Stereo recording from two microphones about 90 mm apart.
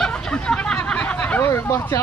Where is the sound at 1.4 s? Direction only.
30° left (ahead or behind).